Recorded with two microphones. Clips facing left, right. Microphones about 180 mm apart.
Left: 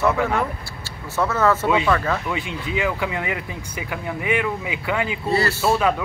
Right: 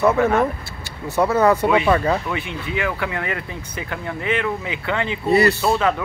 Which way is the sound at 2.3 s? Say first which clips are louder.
Even; 15° left (ahead or behind).